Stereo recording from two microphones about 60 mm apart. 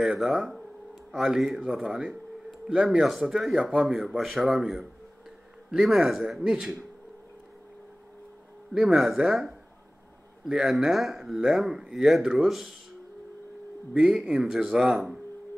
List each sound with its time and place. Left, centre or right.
0.0 s a man's voice: centre
8.7 s a man's voice: centre
13.9 s speech: centre